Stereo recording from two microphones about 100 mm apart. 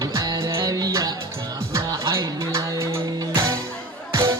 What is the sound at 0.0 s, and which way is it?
Music, 35° right (ahead or behind).